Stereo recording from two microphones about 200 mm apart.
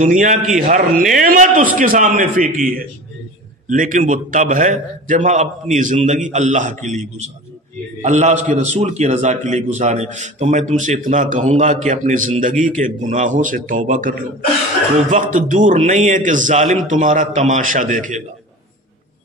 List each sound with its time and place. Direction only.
0.0 s a man's voice: 40° right (ahead or behind)